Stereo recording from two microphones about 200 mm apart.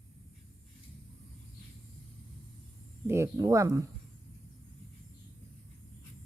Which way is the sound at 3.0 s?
15° right (ahead or behind).